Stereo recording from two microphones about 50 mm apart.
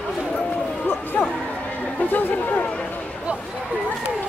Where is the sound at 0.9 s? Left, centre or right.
Left.